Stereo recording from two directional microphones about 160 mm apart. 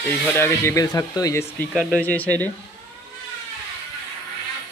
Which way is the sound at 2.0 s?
10° left (ahead or behind).